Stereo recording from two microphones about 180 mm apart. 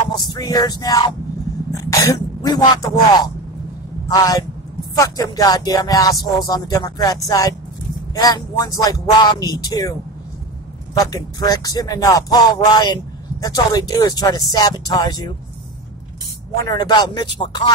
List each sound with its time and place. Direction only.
0.1 s speech: 20° left (ahead or behind)
11.0 s speech: 20° left (ahead or behind)
16.6 s speech: 25° left (ahead or behind)